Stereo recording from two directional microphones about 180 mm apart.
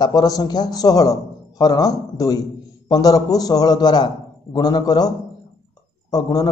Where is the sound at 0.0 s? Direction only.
20° left (ahead or behind).